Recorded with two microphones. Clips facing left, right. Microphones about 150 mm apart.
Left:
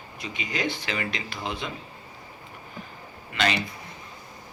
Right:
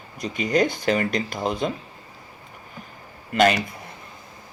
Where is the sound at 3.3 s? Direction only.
50° right (ahead or behind).